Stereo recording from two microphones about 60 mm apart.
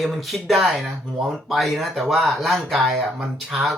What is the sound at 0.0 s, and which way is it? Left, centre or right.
Speech, centre.